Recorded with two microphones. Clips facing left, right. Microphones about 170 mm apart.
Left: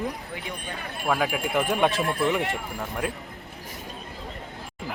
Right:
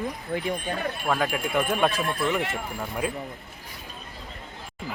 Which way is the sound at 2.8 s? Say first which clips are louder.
Right 2 dB; 5° right (ahead or behind).